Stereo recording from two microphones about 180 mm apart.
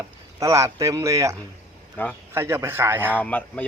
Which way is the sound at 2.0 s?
10° left (ahead or behind).